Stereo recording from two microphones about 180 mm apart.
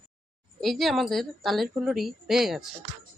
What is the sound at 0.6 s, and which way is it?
A woman's voice, centre (ahead or behind).